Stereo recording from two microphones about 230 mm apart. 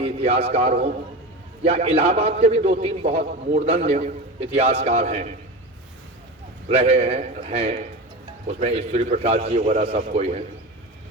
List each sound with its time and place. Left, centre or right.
0.0 s a man's voice: right
6.7 s a man's voice: right